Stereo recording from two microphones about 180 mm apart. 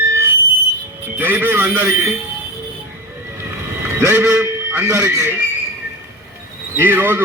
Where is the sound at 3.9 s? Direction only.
15° right (ahead or behind).